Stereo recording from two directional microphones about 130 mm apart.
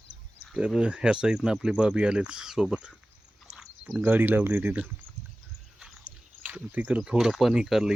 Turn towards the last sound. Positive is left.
turn(degrees=-5)  # may be behind; listen again after turning